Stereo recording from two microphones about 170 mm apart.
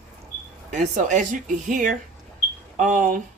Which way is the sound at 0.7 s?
45° right (ahead or behind).